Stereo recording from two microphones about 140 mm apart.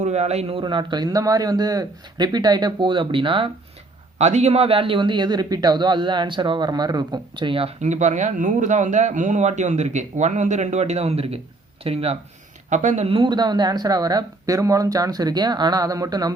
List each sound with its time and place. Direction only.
0.0 s speech: 50° right (ahead or behind)
4.2 s speech: 55° right (ahead or behind)
7.8 s speech: 55° right (ahead or behind)
12.7 s speech: 60° right (ahead or behind)
13.1 s speech: 35° right (ahead or behind)